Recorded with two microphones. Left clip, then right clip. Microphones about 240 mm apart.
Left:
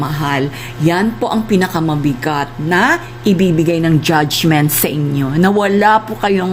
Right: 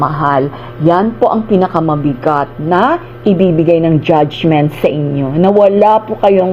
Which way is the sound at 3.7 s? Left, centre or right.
Left.